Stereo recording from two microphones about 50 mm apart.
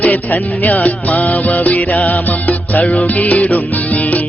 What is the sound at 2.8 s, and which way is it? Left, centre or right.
Music, left.